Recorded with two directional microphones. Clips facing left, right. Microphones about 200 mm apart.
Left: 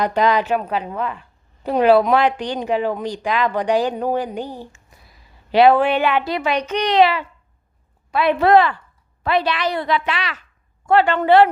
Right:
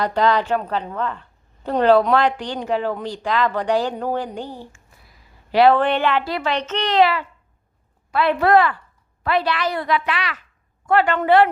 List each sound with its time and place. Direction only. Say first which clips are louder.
0.0 s a woman's voice: left 1 dB; 15° left (ahead or behind)